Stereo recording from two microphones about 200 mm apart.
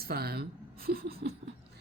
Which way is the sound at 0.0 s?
50° right (ahead or behind).